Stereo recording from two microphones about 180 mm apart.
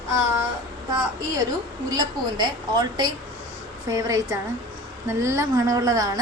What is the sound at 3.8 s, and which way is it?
A woman's voice, 20° right (ahead or behind).